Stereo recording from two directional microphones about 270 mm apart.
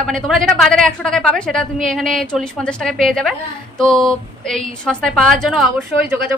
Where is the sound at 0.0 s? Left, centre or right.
Centre.